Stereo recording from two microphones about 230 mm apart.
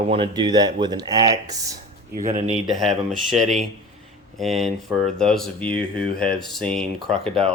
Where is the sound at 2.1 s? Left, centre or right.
Right.